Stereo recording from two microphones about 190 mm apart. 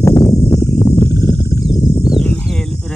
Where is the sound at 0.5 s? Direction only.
20° left (ahead or behind).